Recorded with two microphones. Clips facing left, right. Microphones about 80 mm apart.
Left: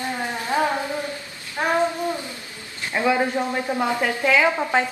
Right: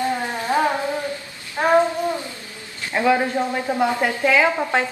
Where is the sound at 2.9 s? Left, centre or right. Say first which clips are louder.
Right 2 dB; centre.